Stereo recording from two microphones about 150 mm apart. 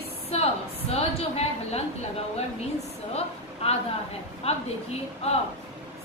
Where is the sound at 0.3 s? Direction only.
40° left (ahead or behind).